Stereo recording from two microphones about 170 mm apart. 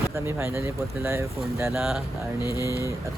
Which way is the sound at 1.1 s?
15° right (ahead or behind).